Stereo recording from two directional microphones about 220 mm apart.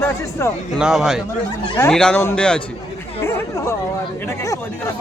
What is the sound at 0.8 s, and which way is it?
Speech, centre (ahead or behind).